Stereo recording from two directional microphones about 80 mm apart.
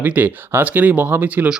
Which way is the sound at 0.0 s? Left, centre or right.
Right.